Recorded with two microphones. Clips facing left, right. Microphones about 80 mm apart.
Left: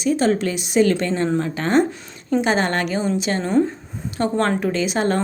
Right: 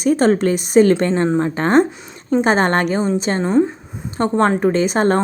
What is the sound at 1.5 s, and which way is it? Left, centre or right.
Speech, right.